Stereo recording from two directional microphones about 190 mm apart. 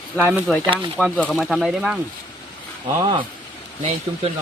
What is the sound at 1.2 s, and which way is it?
Speech, centre (ahead or behind).